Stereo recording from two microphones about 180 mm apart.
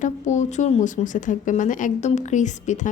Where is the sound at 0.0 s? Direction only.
40° left (ahead or behind).